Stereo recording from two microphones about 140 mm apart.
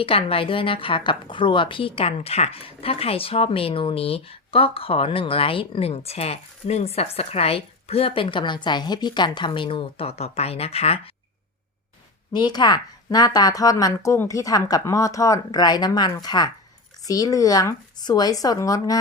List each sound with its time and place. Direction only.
0.0 s a woman's voice: 40° left (ahead or behind)
12.3 s a woman's voice: 30° left (ahead or behind)